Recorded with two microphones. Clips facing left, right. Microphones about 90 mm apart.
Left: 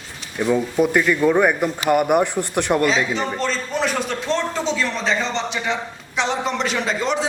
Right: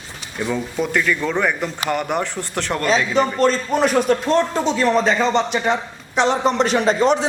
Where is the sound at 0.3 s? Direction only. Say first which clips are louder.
Left 4 dB; 10° left (ahead or behind).